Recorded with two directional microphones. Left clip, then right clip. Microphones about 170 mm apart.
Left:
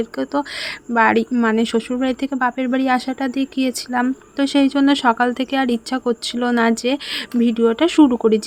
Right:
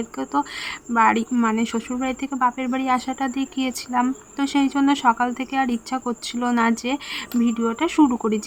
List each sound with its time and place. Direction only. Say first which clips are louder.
0.0 s speech: left 3 dB; 20° left (ahead or behind)